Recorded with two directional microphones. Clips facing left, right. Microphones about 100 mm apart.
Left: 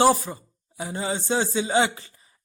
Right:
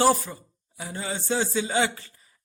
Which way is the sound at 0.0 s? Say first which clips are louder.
Left 2 dB; 20° left (ahead or behind).